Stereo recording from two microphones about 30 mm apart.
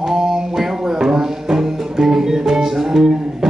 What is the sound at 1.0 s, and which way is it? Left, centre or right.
Music, centre.